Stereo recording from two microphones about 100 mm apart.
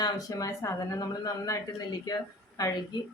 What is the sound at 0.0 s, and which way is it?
Speech, 40° left (ahead or behind).